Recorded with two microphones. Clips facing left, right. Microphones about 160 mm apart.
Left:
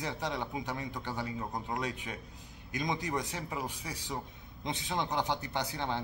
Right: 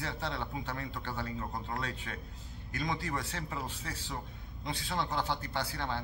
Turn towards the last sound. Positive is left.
turn(degrees=20)  # may be behind; listen again after turning